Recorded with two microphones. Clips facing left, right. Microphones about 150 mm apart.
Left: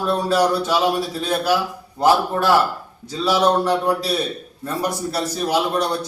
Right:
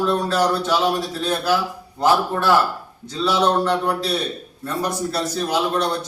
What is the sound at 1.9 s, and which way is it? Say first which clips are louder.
A man's voice: left 2 dB; 15° left (ahead or behind).